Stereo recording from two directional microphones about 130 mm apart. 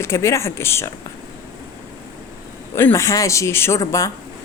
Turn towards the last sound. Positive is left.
turn(degrees=25)  # may be behind; listen again after turning